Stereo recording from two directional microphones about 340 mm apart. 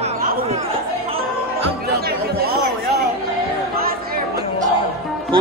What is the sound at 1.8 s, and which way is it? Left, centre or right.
Speech, right.